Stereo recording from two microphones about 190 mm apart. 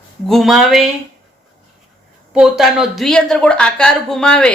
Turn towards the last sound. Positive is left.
turn(degrees=5)  # may be behind; listen again after turning